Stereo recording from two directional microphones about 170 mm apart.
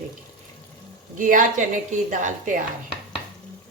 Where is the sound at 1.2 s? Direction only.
50° right (ahead or behind).